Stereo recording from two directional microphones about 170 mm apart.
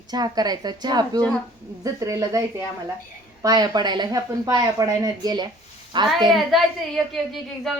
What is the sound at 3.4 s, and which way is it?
A woman's voice, 20° right (ahead or behind).